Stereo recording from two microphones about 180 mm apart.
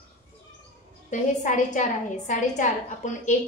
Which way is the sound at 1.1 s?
45° left (ahead or behind).